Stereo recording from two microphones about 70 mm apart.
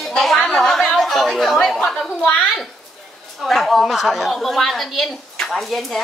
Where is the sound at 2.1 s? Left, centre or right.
Left.